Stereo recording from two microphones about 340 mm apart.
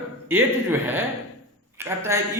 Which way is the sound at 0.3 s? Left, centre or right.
Centre.